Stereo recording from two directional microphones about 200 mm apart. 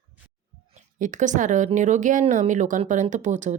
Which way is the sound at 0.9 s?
40° right (ahead or behind).